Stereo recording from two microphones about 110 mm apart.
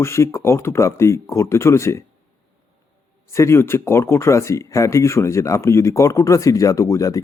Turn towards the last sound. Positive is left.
turn(degrees=30)  # may be behind; listen again after turning